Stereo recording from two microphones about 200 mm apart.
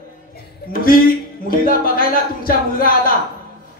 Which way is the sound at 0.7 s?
45° left (ahead or behind).